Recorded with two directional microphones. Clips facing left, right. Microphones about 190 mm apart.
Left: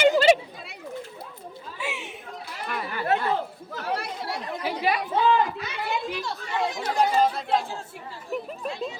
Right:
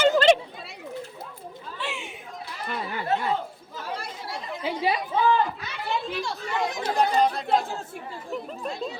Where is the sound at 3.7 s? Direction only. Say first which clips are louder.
Left 4 dB; 70° left (ahead or behind).